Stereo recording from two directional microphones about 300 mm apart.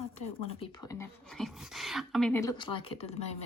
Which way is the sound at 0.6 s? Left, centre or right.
Centre.